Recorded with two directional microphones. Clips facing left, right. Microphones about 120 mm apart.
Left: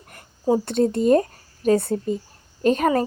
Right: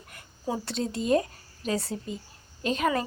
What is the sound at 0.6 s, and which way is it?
Speech, 55° left (ahead or behind).